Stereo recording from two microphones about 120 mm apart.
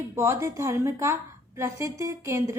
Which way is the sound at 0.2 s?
25° right (ahead or behind).